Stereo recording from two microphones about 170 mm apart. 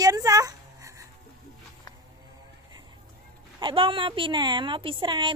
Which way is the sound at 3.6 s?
30° right (ahead or behind).